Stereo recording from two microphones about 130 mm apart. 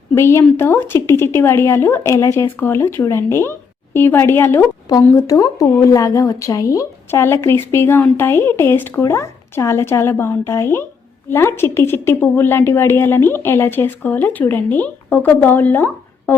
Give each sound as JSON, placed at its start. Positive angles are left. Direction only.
{"t": 0.1, "sound": "speech", "side_deg": 20}